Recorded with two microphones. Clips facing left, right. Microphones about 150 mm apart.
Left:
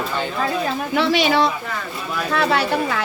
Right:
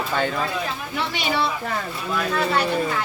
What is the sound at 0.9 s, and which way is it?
A woman's voice, 90° left.